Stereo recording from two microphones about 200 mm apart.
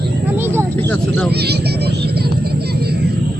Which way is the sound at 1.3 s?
55° right (ahead or behind).